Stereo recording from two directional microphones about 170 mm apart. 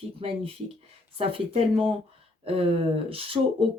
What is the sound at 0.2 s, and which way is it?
Speech, 35° right (ahead or behind).